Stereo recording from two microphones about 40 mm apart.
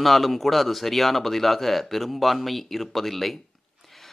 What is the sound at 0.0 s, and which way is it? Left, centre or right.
A man's voice, centre.